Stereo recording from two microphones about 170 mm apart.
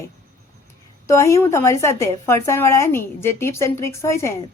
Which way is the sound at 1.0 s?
15° left (ahead or behind).